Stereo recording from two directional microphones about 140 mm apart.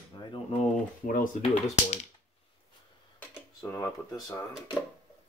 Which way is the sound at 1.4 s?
50° left (ahead or behind).